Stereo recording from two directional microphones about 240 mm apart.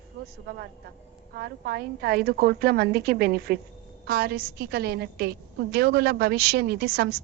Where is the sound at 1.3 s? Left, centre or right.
Right.